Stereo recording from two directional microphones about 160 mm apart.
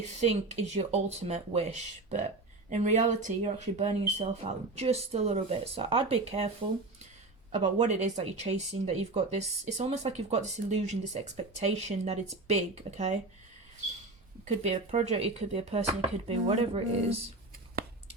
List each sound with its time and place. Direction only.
0.2 s speech: 40° right (ahead or behind)
7.5 s speech: 45° right (ahead or behind)
14.4 s speech: 45° right (ahead or behind)